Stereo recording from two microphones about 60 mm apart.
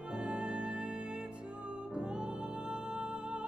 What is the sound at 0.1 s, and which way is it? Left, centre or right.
Music, centre.